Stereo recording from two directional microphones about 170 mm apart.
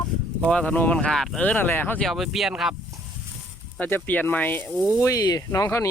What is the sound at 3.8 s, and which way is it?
A man's voice, 10° left (ahead or behind).